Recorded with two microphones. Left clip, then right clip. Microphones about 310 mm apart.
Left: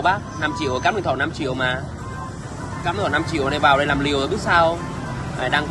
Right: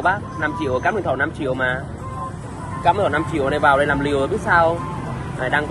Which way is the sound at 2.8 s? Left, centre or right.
Centre.